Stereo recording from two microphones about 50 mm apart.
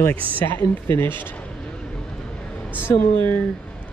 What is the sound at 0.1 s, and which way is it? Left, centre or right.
Speech, left.